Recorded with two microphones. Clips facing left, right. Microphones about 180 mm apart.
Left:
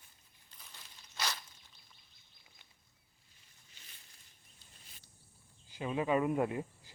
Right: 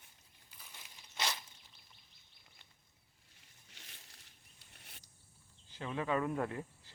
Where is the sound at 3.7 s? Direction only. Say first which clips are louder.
Right 4 dB; 80° right.